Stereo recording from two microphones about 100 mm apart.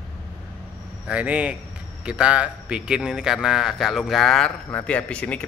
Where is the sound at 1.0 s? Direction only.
10° right (ahead or behind).